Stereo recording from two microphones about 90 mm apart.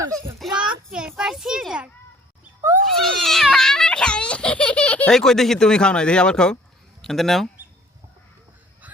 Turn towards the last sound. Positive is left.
turn(degrees=0)  # may be behind; listen again after turning